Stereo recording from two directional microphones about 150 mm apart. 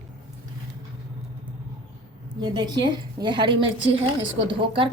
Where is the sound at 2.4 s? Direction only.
30° right (ahead or behind).